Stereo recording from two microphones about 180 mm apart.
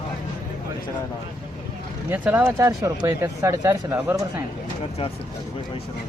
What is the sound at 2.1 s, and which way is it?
Speech, 10° right (ahead or behind).